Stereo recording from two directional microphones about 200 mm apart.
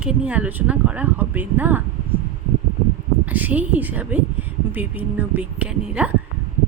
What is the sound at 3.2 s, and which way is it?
A woman's voice, 10° right (ahead or behind).